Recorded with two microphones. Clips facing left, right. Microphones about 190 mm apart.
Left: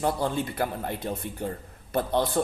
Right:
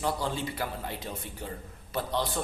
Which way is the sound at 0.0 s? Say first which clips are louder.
Left 4 dB; 55° left (ahead or behind).